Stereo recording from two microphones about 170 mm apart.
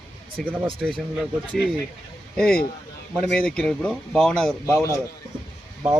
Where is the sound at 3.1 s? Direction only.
Centre (ahead or behind).